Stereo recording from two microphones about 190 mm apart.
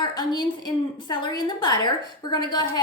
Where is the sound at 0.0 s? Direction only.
20° left (ahead or behind).